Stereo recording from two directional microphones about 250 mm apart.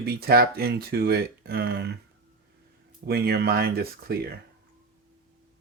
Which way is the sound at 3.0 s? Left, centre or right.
Right.